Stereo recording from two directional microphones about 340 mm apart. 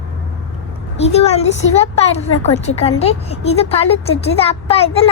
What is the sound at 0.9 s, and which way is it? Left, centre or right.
A woman's voice, centre.